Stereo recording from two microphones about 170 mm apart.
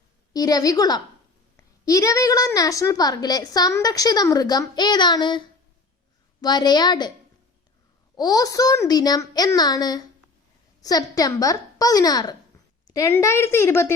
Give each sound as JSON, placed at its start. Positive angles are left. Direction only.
{"t": 0.3, "sound": "a woman's voice", "side_deg": 20}
{"t": 8.1, "sound": "a woman's voice", "side_deg": 20}